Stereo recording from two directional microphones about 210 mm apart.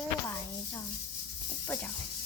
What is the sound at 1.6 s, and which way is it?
Speech, 5° left (ahead or behind).